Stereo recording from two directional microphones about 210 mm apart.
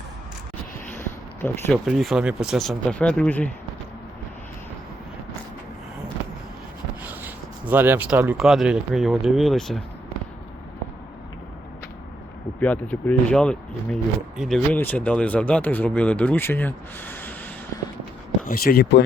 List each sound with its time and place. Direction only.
0.9 s a sound: 10° left (ahead or behind)
1.8 s speech: centre (ahead or behind)
7.0 s speech: 10° right (ahead or behind)
12.5 s speech: 5° left (ahead or behind)
18.4 s speech: 45° left (ahead or behind)